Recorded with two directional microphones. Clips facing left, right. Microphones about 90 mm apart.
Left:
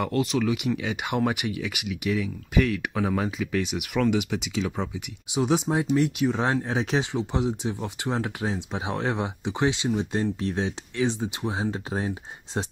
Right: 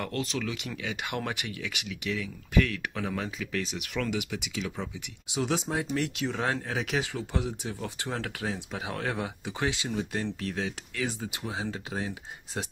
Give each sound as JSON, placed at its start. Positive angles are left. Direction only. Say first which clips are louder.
{"t": 0.0, "sound": "speech", "louder": "left 8 dB", "side_deg": 10}